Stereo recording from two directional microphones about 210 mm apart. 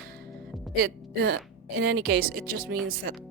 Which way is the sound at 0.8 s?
50° right (ahead or behind).